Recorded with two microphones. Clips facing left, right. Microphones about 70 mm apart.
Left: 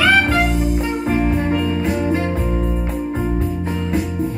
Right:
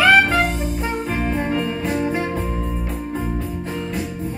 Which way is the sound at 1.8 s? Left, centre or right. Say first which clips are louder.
Left 2 dB; centre.